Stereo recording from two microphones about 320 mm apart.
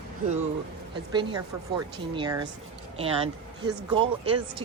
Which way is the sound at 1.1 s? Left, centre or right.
Centre.